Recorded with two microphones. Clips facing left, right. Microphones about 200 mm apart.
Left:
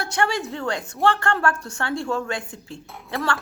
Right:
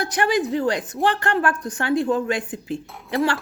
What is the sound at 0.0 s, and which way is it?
A woman's voice, 15° right (ahead or behind).